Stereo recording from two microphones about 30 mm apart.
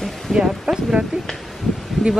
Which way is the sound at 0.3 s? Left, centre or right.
Centre.